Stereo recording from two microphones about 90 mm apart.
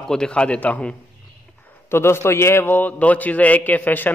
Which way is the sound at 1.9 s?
30° left (ahead or behind).